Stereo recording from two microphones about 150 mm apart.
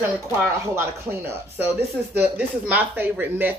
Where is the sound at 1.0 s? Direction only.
15° right (ahead or behind).